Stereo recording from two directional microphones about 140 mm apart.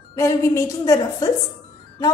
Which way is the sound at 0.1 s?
20° left (ahead or behind).